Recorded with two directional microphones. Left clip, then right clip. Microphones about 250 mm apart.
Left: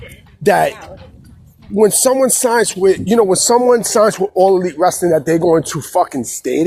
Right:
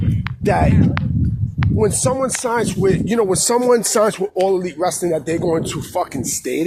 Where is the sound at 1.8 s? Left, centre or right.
Left.